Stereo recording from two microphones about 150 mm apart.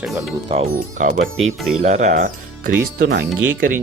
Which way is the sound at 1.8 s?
50° right (ahead or behind).